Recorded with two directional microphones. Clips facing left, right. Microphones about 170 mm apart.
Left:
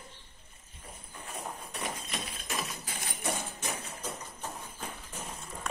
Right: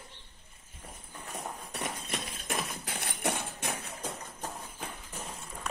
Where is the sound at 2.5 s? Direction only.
55° right (ahead or behind).